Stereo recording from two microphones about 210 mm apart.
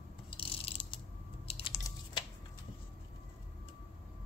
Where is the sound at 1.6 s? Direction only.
20° left (ahead or behind).